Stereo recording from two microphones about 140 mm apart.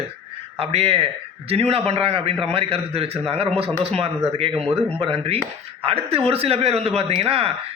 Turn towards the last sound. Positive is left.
turn(degrees=-45)  # may be behind; listen again after turning